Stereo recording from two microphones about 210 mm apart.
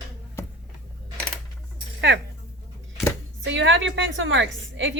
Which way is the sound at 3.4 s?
60° right (ahead or behind).